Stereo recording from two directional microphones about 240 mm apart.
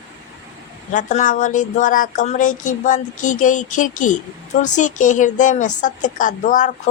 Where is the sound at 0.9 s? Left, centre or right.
Left.